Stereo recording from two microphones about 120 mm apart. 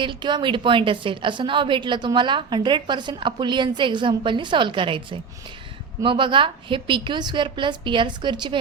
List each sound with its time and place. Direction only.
0.0 s a woman's voice: 40° right (ahead or behind)